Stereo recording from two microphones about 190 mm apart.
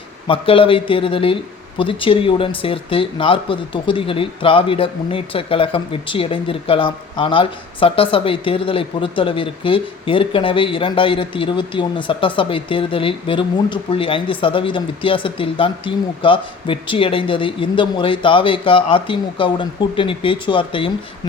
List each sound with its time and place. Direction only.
0.3 s speech: 30° left (ahead or behind)